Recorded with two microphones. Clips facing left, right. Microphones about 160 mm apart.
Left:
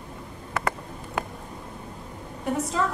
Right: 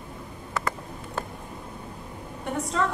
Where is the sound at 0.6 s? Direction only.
65° left (ahead or behind).